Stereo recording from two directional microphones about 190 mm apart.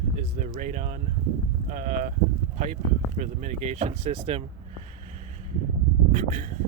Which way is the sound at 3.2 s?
40° right (ahead or behind).